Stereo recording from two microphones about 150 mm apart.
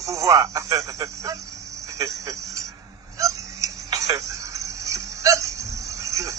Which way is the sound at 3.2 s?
20° right (ahead or behind).